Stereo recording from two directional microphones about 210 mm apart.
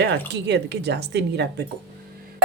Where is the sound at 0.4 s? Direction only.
55° right (ahead or behind).